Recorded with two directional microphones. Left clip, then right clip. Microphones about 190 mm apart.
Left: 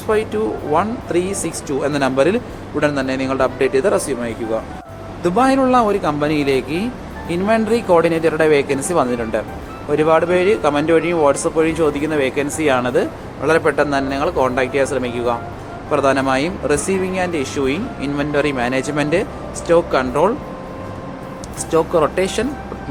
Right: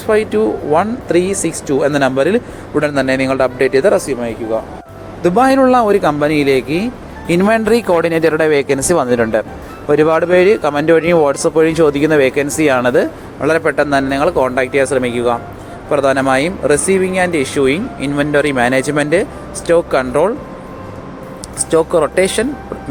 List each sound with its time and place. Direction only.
0.1 s speech: 25° right (ahead or behind)
5.2 s speech: 35° right (ahead or behind)
7.3 s speech: 45° right (ahead or behind); by 20.3 s 25° right (ahead or behind)
21.7 s speech: 30° right (ahead or behind)